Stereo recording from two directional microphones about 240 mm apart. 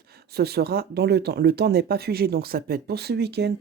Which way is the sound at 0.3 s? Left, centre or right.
Right.